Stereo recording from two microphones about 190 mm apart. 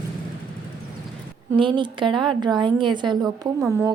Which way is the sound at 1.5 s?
25° right (ahead or behind).